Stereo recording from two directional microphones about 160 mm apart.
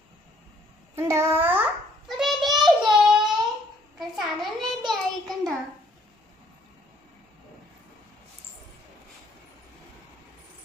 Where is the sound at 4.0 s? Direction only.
Centre (ahead or behind).